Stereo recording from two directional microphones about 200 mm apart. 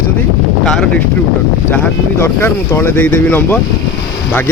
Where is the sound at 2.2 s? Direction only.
10° left (ahead or behind).